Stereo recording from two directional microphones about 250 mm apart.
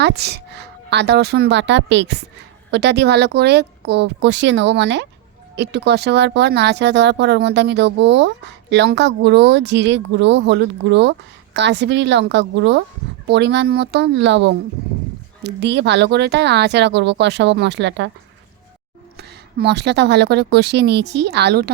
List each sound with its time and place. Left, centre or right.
0.0 s speech: right
19.1 s a woman's voice: right